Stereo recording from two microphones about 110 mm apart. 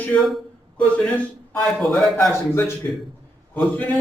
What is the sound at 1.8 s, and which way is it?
Speech, centre (ahead or behind).